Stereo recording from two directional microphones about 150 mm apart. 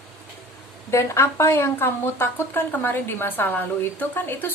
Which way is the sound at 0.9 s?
20° left (ahead or behind).